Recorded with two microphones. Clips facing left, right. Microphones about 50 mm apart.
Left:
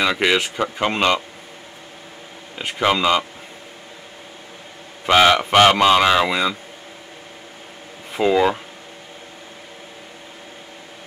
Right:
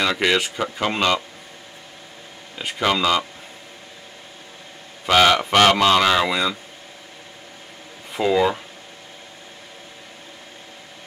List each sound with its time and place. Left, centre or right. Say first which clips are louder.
0.0 s speech: left 1 dB; centre
2.6 s speech: left 2 dB; centre
5.0 s speech: left 2 dB; centre
8.1 s speech: left 2 dB; centre